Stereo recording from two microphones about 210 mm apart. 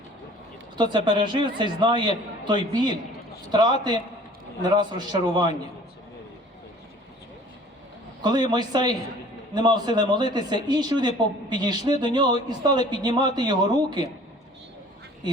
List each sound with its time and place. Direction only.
0.8 s a woman's voice: 20° right (ahead or behind)
8.2 s a woman's voice: 20° right (ahead or behind)